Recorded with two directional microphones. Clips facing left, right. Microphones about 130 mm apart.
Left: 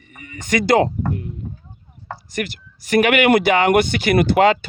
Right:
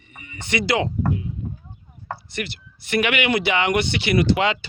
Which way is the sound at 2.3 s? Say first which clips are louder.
Left 8 dB; 45° left (ahead or behind).